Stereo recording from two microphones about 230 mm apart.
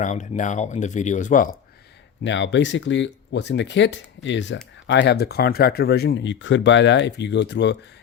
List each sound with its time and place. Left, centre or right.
0.0 s speech: left
2.2 s speech: left